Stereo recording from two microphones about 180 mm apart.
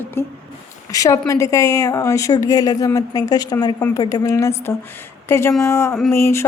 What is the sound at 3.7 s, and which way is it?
Speech, 10° left (ahead or behind).